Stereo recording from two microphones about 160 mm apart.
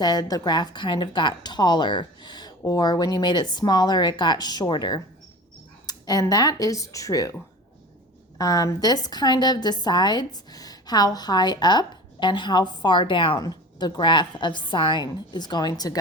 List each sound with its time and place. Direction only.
0.0 s a woman's voice: 25° left (ahead or behind)
8.4 s a woman's voice: 25° left (ahead or behind)